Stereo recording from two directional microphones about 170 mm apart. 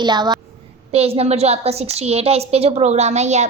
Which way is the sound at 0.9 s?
35° right (ahead or behind).